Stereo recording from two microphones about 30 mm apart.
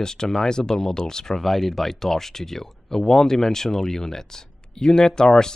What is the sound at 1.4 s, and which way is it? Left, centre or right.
Speech, centre.